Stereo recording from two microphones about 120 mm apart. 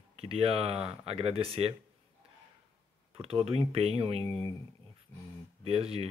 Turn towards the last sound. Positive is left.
turn(degrees=-55)  # may be behind; listen again after turning